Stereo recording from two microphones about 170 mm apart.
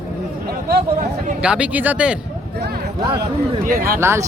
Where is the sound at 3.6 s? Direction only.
55° right (ahead or behind).